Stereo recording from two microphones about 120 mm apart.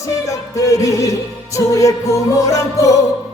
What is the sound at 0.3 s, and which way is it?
Music, 25° left (ahead or behind).